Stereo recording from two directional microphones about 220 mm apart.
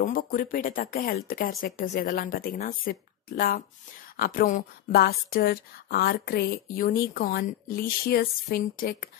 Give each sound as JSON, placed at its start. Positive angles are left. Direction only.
{"t": 0.0, "sound": "speech", "side_deg": 40}